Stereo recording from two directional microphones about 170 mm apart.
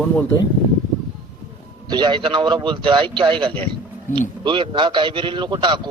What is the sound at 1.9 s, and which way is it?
A man's voice, 25° right (ahead or behind).